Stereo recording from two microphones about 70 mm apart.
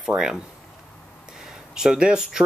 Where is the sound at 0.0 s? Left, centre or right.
Centre.